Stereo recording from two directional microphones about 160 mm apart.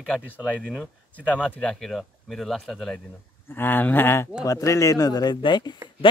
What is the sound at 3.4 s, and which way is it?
Speech, 15° left (ahead or behind).